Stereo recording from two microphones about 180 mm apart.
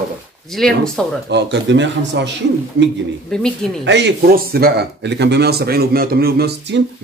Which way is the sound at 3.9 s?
75° right (ahead or behind).